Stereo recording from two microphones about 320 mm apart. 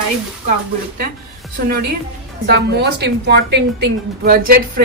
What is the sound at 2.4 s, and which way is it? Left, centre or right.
A woman's voice, right.